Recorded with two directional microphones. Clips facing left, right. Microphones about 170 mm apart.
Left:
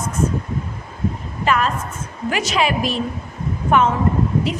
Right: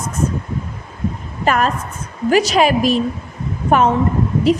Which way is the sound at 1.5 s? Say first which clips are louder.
Right 2 dB; 45° right (ahead or behind).